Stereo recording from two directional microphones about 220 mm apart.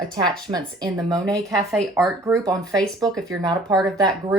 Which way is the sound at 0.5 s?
15° right (ahead or behind).